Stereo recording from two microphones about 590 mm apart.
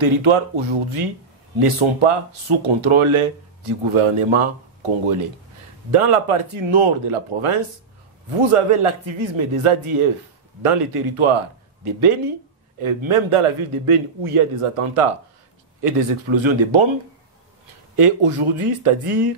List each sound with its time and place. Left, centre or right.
0.0 s a man's voice: right
17.9 s a man's voice: right